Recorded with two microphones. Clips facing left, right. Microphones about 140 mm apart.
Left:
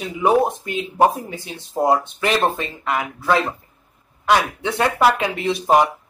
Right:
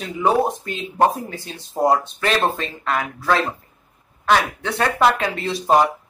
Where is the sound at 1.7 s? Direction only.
Centre (ahead or behind).